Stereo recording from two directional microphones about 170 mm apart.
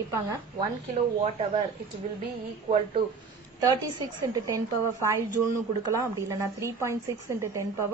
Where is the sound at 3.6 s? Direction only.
20° right (ahead or behind).